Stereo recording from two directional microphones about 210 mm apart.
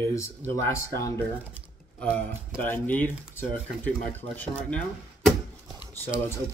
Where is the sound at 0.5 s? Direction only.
15° left (ahead or behind).